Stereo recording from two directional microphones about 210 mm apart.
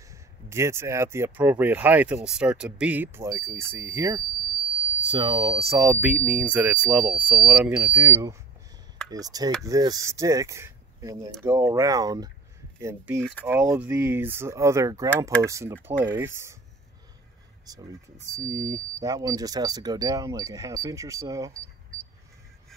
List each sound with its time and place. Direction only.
0.1 s speech: 15° right (ahead or behind)
5.0 s speech: 20° right (ahead or behind)
13.2 s speech: 5° left (ahead or behind)
13.5 s speech: 10° right (ahead or behind)
17.7 s speech: 15° right (ahead or behind)